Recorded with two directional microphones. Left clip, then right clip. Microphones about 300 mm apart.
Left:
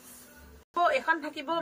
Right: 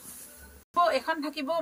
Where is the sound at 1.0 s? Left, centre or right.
Centre.